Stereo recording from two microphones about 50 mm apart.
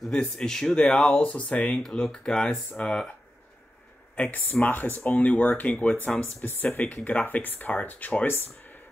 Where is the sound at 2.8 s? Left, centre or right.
Left.